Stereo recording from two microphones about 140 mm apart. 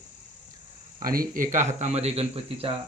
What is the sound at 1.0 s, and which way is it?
Speech, 90° right.